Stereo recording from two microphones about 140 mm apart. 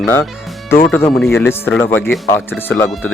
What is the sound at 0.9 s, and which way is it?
Speech, 15° left (ahead or behind).